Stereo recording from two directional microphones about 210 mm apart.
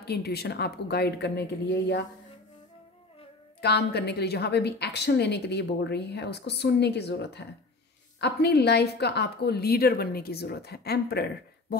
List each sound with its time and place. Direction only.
0.0 s a woman's voice: 50° left (ahead or behind)
3.6 s a woman's voice: 50° left (ahead or behind)